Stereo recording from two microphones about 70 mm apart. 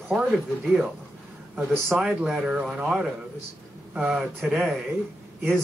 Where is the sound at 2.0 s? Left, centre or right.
Centre.